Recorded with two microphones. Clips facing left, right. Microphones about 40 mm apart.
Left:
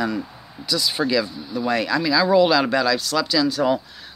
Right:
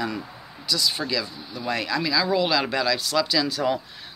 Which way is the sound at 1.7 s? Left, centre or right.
Centre.